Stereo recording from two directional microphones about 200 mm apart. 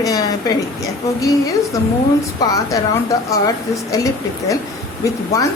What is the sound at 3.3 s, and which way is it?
A woman's voice, 15° left (ahead or behind).